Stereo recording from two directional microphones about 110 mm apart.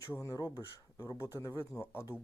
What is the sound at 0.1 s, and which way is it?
Speech, 30° left (ahead or behind).